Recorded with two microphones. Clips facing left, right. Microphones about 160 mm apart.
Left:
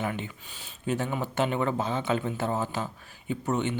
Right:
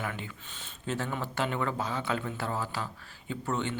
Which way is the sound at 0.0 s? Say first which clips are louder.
Left 5 dB; 20° left (ahead or behind).